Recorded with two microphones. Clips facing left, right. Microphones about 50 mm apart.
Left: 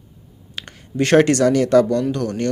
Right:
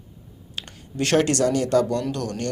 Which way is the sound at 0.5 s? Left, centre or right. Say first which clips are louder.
Left 6 dB; left.